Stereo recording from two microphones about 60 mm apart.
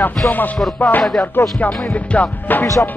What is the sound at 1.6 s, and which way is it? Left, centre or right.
Music, left.